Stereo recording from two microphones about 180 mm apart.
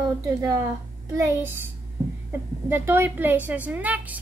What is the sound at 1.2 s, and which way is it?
Speech, 15° right (ahead or behind).